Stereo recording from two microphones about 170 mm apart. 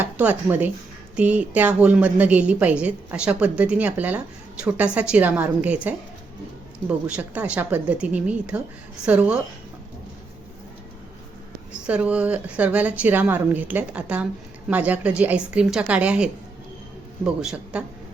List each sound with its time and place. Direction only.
0.0 s a woman's voice: 10° right (ahead or behind)
11.9 s a woman's voice: 5° right (ahead or behind)
17.4 s a man's voice: 5° right (ahead or behind)